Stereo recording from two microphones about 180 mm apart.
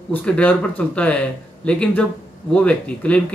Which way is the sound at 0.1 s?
10° left (ahead or behind).